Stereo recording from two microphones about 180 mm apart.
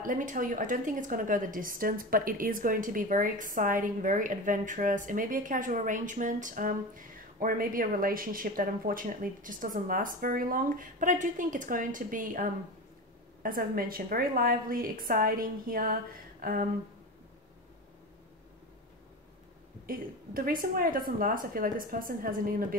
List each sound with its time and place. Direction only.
0.0 s a woman's voice: 45° right (ahead or behind)
19.9 s a woman's voice: 55° right (ahead or behind)